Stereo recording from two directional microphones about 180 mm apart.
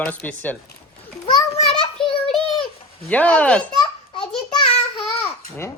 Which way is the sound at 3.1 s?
10° left (ahead or behind).